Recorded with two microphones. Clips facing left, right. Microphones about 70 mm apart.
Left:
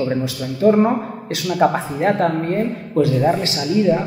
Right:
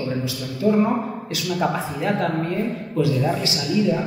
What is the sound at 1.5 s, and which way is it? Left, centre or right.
A man's voice, left.